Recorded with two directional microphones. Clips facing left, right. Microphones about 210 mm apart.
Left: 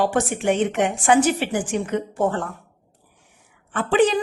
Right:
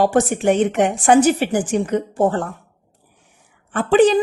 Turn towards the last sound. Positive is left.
turn(degrees=-35)  # may be behind; listen again after turning